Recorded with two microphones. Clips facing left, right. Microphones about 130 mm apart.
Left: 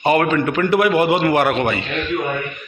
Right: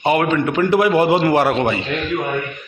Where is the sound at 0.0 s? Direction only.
15° right (ahead or behind).